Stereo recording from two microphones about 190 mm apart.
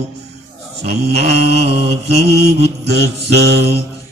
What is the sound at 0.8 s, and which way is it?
Mantra, 55° right (ahead or behind).